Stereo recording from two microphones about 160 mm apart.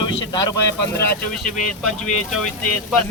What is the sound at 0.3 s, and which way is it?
Speech, 25° left (ahead or behind).